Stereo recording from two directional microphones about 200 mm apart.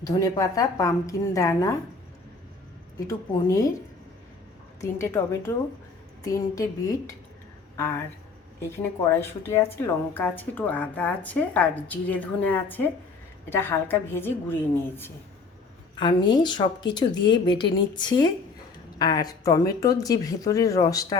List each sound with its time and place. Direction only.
0.0 s speech: 15° left (ahead or behind)
3.1 s speech: 15° left (ahead or behind)
4.8 s speech: 15° left (ahead or behind)
9.1 s speech: 10° left (ahead or behind)
16.0 s a woman's voice: 20° left (ahead or behind)